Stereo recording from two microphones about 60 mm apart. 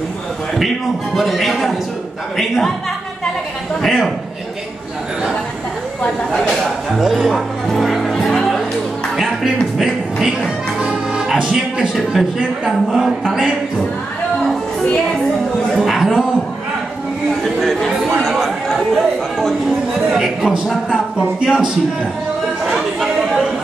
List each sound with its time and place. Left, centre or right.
1.1 s a man's voice: centre
3.8 s a man's voice: centre
6.5 s speech: centre
9.1 s music: centre
11.9 s a man's voice: centre
15.7 s a sound: centre
17.4 s chatter: centre
20.2 s a man's voice: centre
22.7 s speech: centre